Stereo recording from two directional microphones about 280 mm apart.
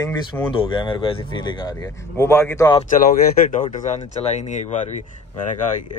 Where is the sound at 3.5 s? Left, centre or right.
Left.